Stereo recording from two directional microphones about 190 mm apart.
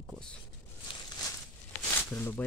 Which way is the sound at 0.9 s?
20° left (ahead or behind).